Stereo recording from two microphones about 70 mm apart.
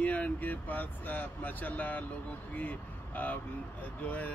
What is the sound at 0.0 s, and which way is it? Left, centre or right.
Speech, left.